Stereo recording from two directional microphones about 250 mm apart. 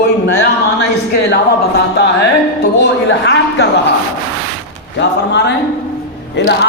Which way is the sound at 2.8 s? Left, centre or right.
Left.